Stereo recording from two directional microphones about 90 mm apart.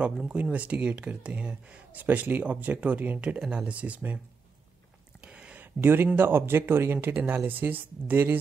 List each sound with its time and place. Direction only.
0.0 s speech: 10° right (ahead or behind)
5.2 s a sound: 10° right (ahead or behind)
5.8 s speech: 25° right (ahead or behind)